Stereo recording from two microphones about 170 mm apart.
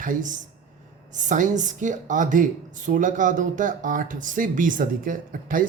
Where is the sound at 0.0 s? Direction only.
50° right (ahead or behind).